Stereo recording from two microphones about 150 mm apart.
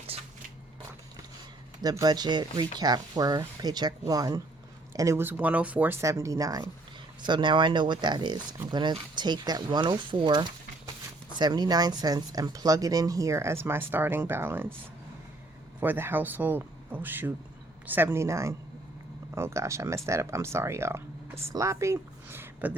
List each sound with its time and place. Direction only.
0.1 s a sound: 40° right (ahead or behind)
1.8 s speech: 25° right (ahead or behind)
15.8 s speech: 15° right (ahead or behind)